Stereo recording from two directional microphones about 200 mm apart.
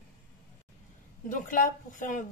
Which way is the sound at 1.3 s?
40° left (ahead or behind).